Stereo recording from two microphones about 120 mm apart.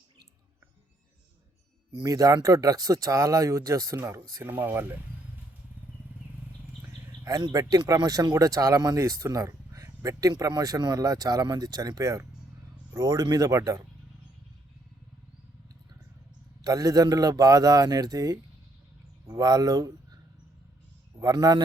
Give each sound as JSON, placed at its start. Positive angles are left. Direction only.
{"t": 2.0, "sound": "speech", "side_deg": -30}
{"t": 7.3, "sound": "speech", "side_deg": -30}
{"t": 16.6, "sound": "speech", "side_deg": -30}
{"t": 21.2, "sound": "speech", "side_deg": -30}